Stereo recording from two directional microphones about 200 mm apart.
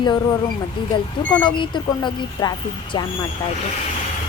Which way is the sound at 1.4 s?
25° left (ahead or behind).